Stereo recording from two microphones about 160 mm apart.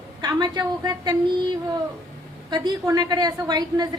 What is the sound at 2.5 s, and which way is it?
A woman's voice, 25° right (ahead or behind).